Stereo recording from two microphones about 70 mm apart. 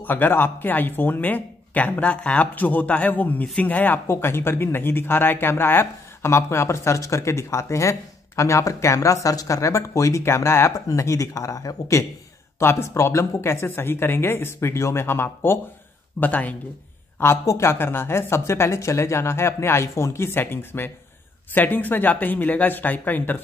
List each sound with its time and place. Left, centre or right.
0.0 s speech: left
10.2 s speech: left
10.9 s speech: left
12.5 s speech: left
16.2 s speech: left
17.5 s speech: left